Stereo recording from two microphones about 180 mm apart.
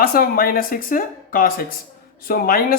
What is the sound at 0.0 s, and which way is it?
Speech, 55° left (ahead or behind).